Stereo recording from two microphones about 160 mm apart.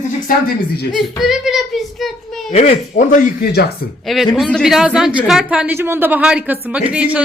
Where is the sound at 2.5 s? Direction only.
40° left (ahead or behind).